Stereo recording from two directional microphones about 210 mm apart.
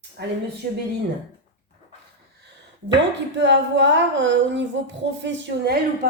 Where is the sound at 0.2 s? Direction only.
50° right (ahead or behind).